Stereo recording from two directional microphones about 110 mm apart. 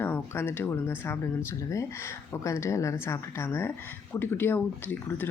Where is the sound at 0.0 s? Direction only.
20° left (ahead or behind).